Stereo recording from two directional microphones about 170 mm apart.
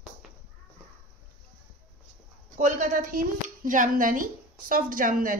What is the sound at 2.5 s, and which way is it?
A woman's voice, 45° right (ahead or behind).